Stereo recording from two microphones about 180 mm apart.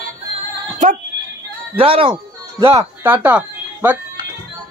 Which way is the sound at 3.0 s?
10° right (ahead or behind).